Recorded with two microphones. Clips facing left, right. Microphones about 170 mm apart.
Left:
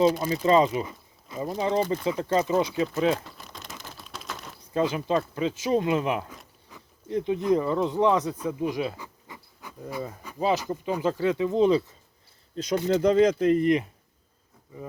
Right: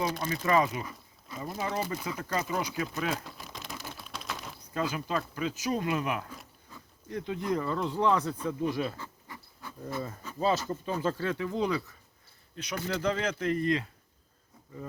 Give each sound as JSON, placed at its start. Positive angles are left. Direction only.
{"t": 0.3, "sound": "speech", "side_deg": 25}
{"t": 3.2, "sound": "a sound", "side_deg": 0}
{"t": 4.7, "sound": "speech", "side_deg": 25}